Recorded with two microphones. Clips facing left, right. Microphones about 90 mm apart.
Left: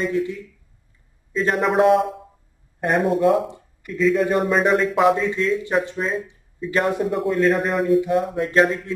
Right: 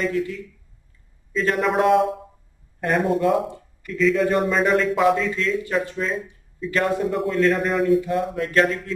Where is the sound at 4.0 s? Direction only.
5° left (ahead or behind).